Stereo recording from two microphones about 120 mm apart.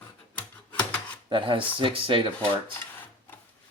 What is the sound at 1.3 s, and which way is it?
Speech, 45° right (ahead or behind).